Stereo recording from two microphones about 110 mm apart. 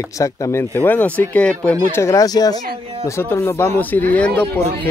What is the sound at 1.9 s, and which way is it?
Speech, 25° left (ahead or behind).